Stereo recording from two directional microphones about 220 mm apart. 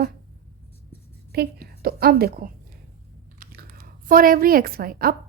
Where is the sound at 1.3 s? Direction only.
45° right (ahead or behind).